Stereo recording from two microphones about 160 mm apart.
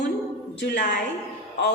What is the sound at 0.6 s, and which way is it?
Speech, 90° left.